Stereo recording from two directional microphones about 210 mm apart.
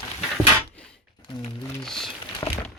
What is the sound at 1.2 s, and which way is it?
Speech, 20° left (ahead or behind).